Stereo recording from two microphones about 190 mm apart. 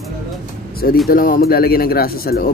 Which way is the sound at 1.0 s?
50° left (ahead or behind).